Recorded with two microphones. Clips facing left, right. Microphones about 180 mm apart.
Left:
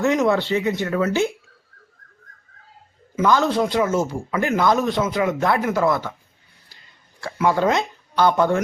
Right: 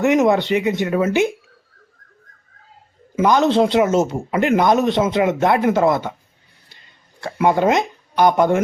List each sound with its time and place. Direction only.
0.0 s speech: 20° right (ahead or behind)
3.2 s speech: 20° right (ahead or behind)
7.3 s speech: 20° right (ahead or behind)